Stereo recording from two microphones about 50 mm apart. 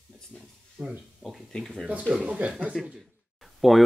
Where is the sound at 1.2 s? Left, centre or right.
Centre.